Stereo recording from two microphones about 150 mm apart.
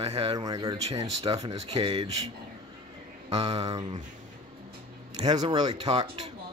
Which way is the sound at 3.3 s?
40° right (ahead or behind).